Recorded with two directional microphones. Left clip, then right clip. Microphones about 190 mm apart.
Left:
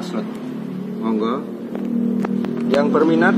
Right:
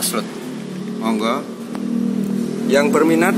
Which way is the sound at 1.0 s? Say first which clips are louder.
Right 2 dB; 5° right (ahead or behind).